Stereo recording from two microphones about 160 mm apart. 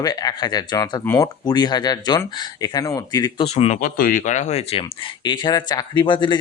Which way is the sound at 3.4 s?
40° left (ahead or behind).